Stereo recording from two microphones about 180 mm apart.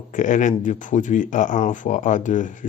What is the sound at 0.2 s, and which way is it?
Speech, 45° left (ahead or behind).